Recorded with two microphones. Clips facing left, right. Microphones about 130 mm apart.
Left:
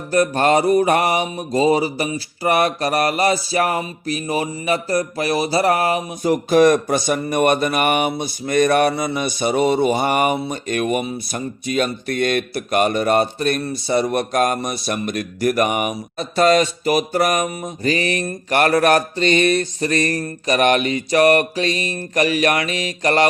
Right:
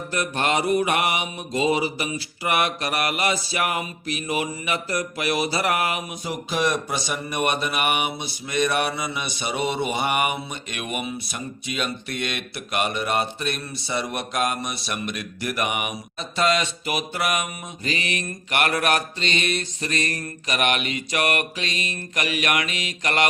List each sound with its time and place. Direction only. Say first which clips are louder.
0.1 s speech: left 9 dB; 40° left (ahead or behind)
6.2 s speech: left 12 dB; 50° left (ahead or behind)